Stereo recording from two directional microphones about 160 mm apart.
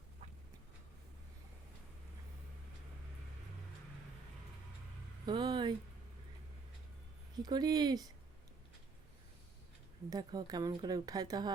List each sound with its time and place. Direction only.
5.2 s speech: 30° right (ahead or behind)
7.4 s speech: 25° right (ahead or behind)
10.1 s speech: 25° right (ahead or behind)